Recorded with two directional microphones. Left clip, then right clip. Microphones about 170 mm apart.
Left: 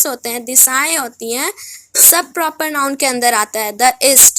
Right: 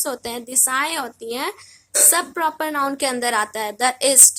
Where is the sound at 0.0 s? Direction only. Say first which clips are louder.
Left 6 dB; 25° left (ahead or behind).